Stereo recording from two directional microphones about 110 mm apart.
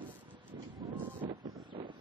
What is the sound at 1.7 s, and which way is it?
Wind, 45° right (ahead or behind).